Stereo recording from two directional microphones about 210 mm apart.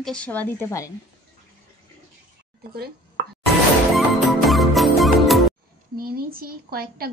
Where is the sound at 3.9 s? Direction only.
Centre (ahead or behind).